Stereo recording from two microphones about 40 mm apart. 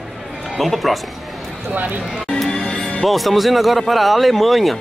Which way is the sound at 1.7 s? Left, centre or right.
Right.